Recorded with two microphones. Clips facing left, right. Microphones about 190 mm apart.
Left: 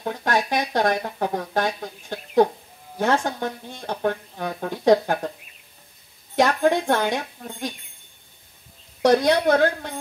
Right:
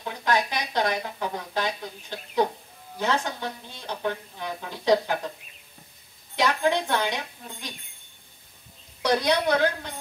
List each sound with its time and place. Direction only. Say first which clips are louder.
0.0 s speech: left 2 dB; 50° left (ahead or behind)
6.3 s speech: left 5 dB; 50° left (ahead or behind)
9.0 s speech: left 6 dB; 50° left (ahead or behind)